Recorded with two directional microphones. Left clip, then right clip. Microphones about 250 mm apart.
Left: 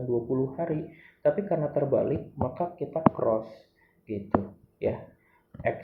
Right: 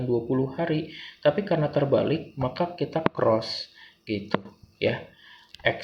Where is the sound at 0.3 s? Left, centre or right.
Right.